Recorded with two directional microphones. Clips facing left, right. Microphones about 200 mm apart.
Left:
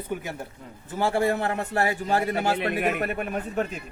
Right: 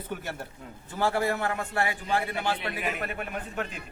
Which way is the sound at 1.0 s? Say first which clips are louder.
Left 3 dB; 25° left (ahead or behind).